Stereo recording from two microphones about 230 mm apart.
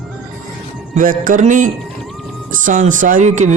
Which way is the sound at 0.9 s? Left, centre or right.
Right.